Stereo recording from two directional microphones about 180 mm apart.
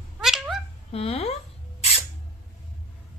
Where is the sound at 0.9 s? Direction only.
35° left (ahead or behind).